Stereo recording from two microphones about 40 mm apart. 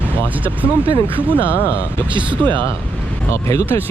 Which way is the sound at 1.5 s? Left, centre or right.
Left.